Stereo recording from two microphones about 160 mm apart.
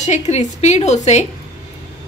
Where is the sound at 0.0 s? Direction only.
45° left (ahead or behind).